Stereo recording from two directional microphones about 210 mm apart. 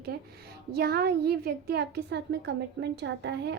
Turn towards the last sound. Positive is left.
turn(degrees=-55)  # may be behind; listen again after turning